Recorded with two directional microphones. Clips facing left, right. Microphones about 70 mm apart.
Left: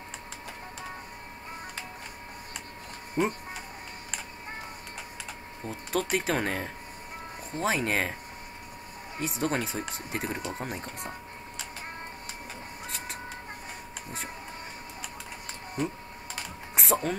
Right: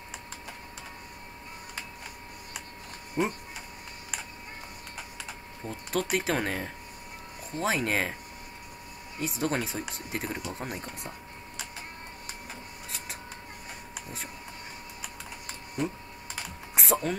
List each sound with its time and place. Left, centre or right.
3.2 s speech: left
5.7 s speech: centre
9.2 s speech: centre
15.8 s speech: centre
16.3 s typing: centre